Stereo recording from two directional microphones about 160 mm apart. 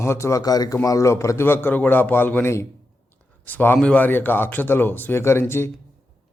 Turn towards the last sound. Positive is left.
turn(degrees=15)  # may be behind; listen again after turning